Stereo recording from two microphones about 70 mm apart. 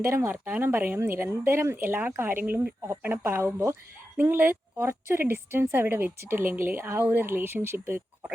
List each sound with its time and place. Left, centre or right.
0.0 s a woman's voice: right
0.3 s a woman's voice: right
4.2 s a woman's voice: right